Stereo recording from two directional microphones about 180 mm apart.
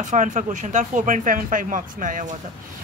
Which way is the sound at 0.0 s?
45° right (ahead or behind).